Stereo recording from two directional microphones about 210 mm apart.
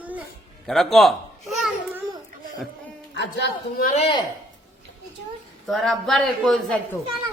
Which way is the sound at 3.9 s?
25° left (ahead or behind).